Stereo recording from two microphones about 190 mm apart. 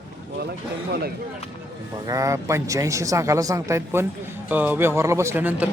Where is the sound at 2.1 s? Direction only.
15° right (ahead or behind).